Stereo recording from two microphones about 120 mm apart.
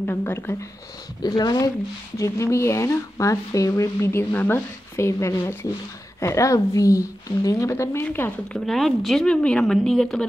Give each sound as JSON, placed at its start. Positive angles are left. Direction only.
{"t": 0.0, "sound": "speech", "side_deg": 20}
{"t": 1.2, "sound": "speech", "side_deg": 35}
{"t": 8.5, "sound": "speech", "side_deg": 0}